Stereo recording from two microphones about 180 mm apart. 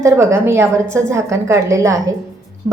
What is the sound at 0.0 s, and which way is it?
A woman's voice, 15° right (ahead or behind).